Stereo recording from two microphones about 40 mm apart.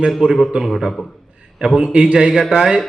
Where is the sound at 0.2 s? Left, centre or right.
Right.